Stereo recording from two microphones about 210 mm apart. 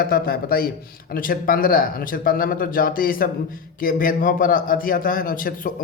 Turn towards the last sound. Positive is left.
turn(degrees=40)  # may be behind; listen again after turning